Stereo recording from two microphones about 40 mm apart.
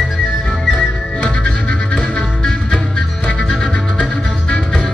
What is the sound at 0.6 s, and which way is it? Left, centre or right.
Music, centre.